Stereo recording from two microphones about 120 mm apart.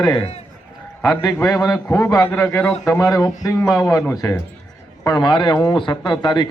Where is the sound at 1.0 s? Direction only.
25° left (ahead or behind).